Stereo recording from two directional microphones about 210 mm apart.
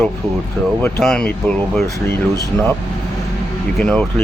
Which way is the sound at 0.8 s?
5° left (ahead or behind).